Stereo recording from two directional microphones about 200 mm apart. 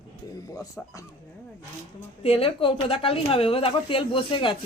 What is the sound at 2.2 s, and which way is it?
Speech, 25° left (ahead or behind).